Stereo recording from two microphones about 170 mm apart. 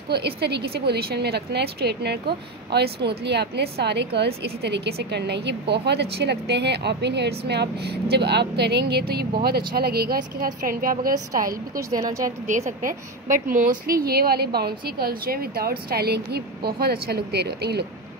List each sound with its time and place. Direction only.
0.1 s a woman's voice: 70° right (ahead or behind); by 11.8 s 55° right (ahead or behind)
11.9 s speech: 20° right (ahead or behind)
12.4 s a woman's voice: 45° right (ahead or behind); by 17.8 s 70° right (ahead or behind)